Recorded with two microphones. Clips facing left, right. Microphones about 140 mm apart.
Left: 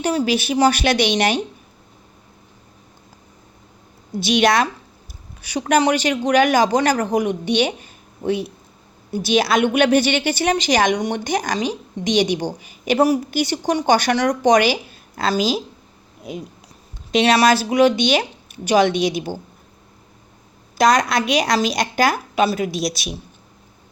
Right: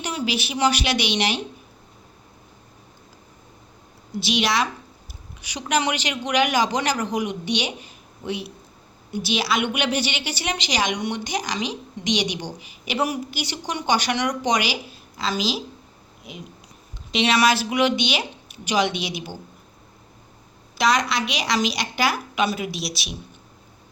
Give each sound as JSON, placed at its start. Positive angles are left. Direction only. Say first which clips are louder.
{"t": 0.0, "sound": "a woman's voice", "louder": "left 7 dB", "side_deg": 40}
{"t": 4.2, "sound": "a woman's voice", "louder": "left 6 dB", "side_deg": 50}
{"t": 17.1, "sound": "a woman's voice", "louder": "left 5 dB", "side_deg": 45}
{"t": 20.7, "sound": "a woman's voice", "louder": "left 5 dB", "side_deg": 45}